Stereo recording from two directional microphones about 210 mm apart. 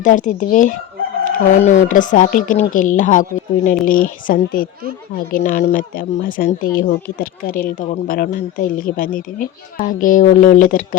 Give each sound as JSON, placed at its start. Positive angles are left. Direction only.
{"t": 0.0, "sound": "speech", "side_deg": 35}